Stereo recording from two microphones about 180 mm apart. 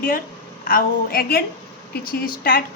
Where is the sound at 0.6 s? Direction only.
55° left (ahead or behind).